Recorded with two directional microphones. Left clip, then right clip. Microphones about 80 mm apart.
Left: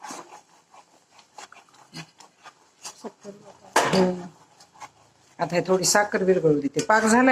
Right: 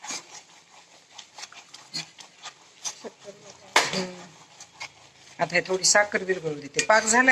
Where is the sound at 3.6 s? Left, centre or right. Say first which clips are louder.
Left 3 dB; left.